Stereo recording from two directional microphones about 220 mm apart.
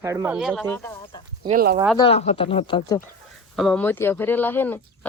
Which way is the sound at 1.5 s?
35° right (ahead or behind).